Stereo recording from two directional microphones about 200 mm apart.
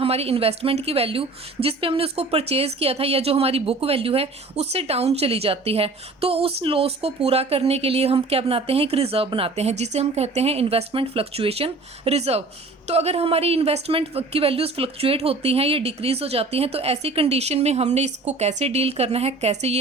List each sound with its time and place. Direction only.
0.0 s a woman's voice: 30° right (ahead or behind)